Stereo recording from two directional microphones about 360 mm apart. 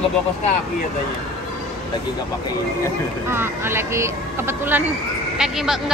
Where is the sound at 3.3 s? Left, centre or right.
Centre.